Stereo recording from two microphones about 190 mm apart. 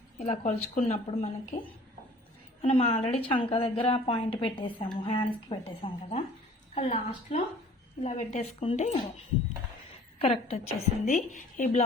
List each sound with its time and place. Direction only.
0.2 s a woman's voice: 35° left (ahead or behind)
2.6 s a woman's voice: 30° left (ahead or behind)
10.2 s a woman's voice: 30° left (ahead or behind)